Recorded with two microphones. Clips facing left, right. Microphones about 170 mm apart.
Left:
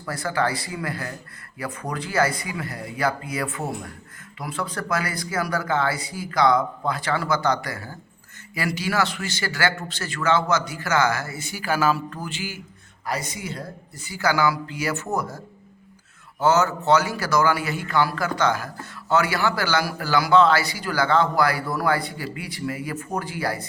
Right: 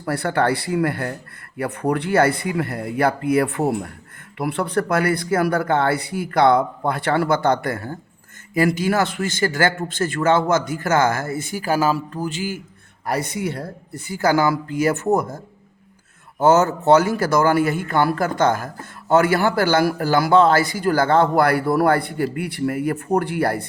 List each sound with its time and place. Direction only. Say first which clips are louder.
0.0 s a man's voice: right 5 dB; 60° right (ahead or behind); by 12.6 s 45° right (ahead or behind)
13.1 s a man's voice: right 6 dB; 60° right (ahead or behind)
16.4 s a man's voice: right 4 dB; 50° right (ahead or behind)